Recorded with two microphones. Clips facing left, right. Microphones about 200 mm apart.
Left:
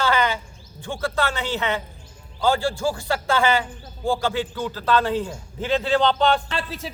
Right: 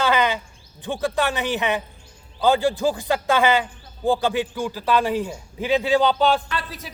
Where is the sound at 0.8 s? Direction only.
15° right (ahead or behind).